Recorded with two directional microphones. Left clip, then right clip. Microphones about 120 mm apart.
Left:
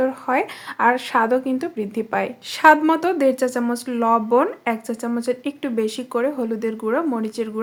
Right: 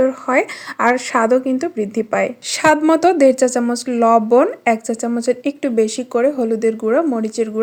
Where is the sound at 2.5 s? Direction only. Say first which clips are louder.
Even; 50° right (ahead or behind).